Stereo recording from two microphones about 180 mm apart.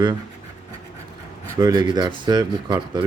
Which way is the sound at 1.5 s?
20° right (ahead or behind).